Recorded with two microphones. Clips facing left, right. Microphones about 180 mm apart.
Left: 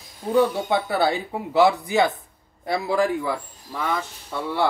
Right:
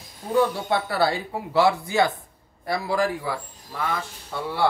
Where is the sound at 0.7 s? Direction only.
20° left (ahead or behind).